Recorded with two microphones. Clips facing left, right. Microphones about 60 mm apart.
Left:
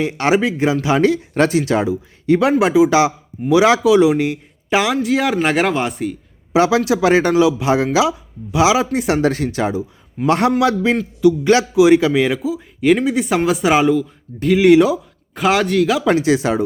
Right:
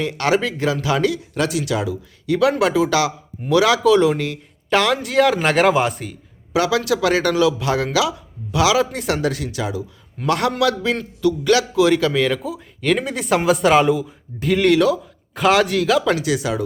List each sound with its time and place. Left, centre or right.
0.0 s speech: left
3.8 s speech: centre
6.5 s speech: left
9.3 s speech: left
10.2 s speech: left
12.4 s speech: centre
14.7 s speech: centre
15.4 s speech: centre
16.0 s speech: left